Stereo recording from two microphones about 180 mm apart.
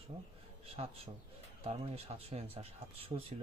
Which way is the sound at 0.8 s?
35° right (ahead or behind).